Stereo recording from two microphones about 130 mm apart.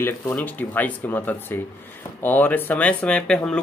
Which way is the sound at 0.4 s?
15° left (ahead or behind).